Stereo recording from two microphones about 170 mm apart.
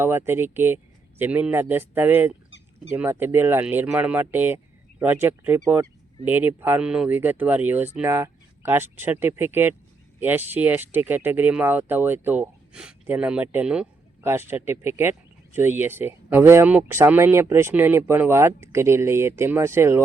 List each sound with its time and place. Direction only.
0.0 s speech: 15° right (ahead or behind)